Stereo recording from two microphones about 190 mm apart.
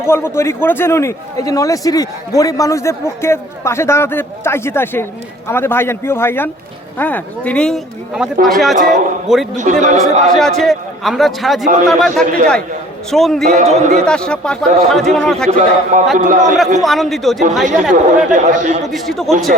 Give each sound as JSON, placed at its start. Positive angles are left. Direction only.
{"t": 0.0, "sound": "a man's voice", "side_deg": 15}
{"t": 9.6, "sound": "a man's voice", "side_deg": -40}
{"t": 10.3, "sound": "speech", "side_deg": 0}
{"t": 13.5, "sound": "a man's voice", "side_deg": -40}
{"t": 14.0, "sound": "speech", "side_deg": 5}
{"t": 15.4, "sound": "a man's voice", "side_deg": -40}
{"t": 16.8, "sound": "speech", "side_deg": 0}
{"t": 17.9, "sound": "a man's voice", "side_deg": -40}
{"t": 18.9, "sound": "speech", "side_deg": 0}